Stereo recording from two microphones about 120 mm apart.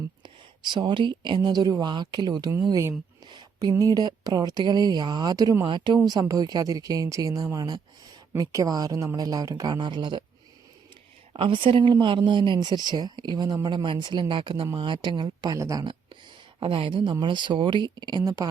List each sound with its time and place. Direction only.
0.2 s speech: 40° right (ahead or behind)
3.2 s a woman's voice: 40° right (ahead or behind)
11.3 s a woman's voice: 45° right (ahead or behind)
15.5 s speech: 25° right (ahead or behind)
15.8 s a sound: 45° right (ahead or behind)
16.6 s a woman's voice: 50° right (ahead or behind)